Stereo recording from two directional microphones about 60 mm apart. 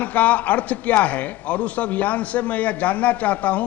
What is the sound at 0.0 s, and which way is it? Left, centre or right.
A man's voice, left.